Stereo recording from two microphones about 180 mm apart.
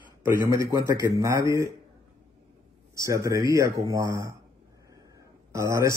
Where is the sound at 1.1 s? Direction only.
15° right (ahead or behind).